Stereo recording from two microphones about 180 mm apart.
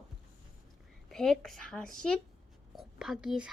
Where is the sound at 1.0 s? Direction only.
Centre (ahead or behind).